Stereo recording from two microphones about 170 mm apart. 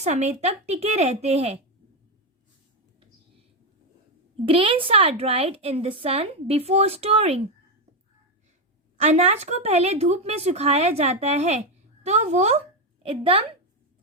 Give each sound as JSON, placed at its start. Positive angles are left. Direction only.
{"t": 0.0, "sound": "a woman's voice", "side_deg": -40}
{"t": 4.4, "sound": "a woman's voice", "side_deg": -30}
{"t": 9.0, "sound": "a woman's voice", "side_deg": -40}